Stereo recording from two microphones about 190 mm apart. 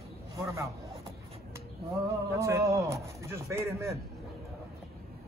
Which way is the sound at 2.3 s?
15° right (ahead or behind).